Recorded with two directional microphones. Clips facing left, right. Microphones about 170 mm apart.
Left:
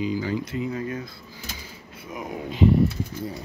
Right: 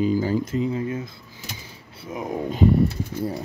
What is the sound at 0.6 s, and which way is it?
Speech, 25° right (ahead or behind).